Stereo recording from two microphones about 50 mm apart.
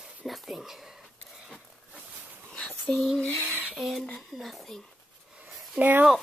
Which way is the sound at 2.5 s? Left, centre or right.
Left.